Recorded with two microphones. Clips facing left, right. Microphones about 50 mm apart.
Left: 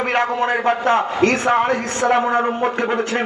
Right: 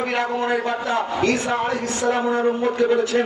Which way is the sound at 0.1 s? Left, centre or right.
Left.